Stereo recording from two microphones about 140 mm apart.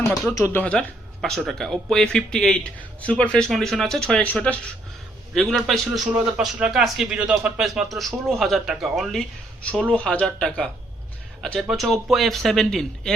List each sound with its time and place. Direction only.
0.3 s speech: 20° left (ahead or behind)
0.6 s speech: 10° left (ahead or behind)
11.7 s speech: centre (ahead or behind)